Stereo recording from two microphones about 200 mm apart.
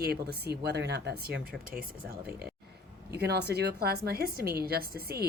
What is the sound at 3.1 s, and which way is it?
A woman's voice, 55° right (ahead or behind).